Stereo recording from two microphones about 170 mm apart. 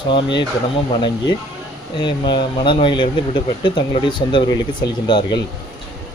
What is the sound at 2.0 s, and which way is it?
Speech, 25° left (ahead or behind).